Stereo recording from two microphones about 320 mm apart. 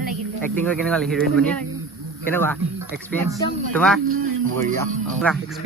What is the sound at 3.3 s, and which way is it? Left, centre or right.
Speech, centre.